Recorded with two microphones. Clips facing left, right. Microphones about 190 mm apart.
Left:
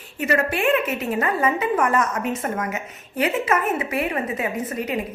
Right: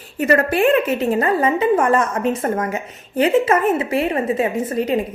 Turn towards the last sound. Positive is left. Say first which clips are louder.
# right 6 dB
turn(degrees=-30)  # may be behind; listen again after turning